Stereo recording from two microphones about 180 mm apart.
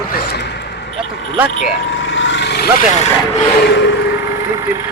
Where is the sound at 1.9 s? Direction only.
90° left; by 2.6 s 70° left (ahead or behind).